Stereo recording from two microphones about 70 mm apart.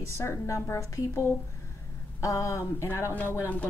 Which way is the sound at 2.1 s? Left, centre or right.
Left.